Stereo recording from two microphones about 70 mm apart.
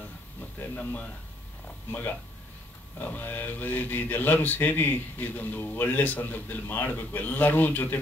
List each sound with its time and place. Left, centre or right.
0.6 s speech: left